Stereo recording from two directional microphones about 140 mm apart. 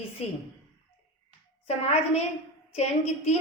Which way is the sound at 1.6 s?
50° left (ahead or behind).